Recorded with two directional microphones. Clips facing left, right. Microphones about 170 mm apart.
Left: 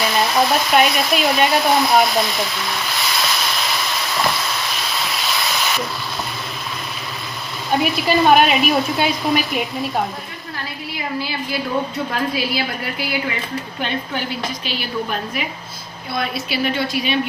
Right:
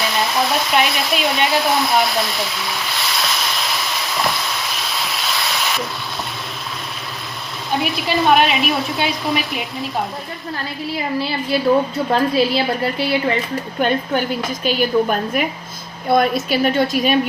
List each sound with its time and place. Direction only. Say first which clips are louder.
0.0 s hair dryer: left 2 dB; centre (ahead or behind)
7.7 s speech: left 3 dB; centre (ahead or behind)
10.9 s speech: right 3 dB; 30° right (ahead or behind)
13.7 s a woman's voice: right 8 dB; 45° right (ahead or behind)